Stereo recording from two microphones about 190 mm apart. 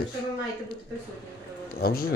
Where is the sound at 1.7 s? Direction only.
55° left (ahead or behind).